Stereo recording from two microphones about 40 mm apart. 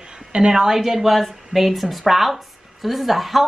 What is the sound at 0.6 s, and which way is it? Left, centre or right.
Speech, centre.